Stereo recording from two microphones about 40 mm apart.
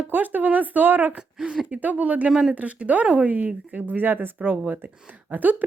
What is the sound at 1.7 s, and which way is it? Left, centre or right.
Speech, right.